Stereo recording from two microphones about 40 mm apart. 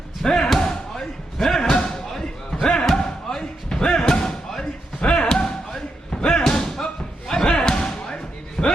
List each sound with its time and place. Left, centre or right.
0.2 s speech: centre
0.5 s slam: centre
6.5 s a sound: centre
7.3 s slam: centre